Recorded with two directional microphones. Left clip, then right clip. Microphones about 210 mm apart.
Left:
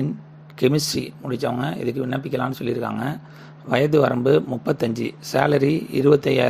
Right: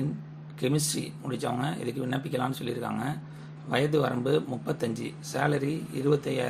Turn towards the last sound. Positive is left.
turn(degrees=35)  # may be behind; listen again after turning